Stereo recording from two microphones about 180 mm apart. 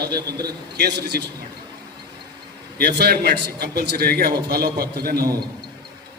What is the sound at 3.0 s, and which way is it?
A man's voice, 60° right (ahead or behind).